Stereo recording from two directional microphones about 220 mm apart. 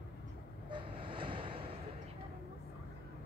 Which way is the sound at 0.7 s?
25° right (ahead or behind).